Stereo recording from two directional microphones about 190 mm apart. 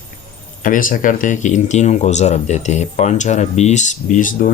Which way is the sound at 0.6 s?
45° left (ahead or behind).